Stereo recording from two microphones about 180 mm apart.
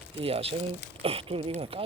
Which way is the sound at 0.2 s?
30° right (ahead or behind).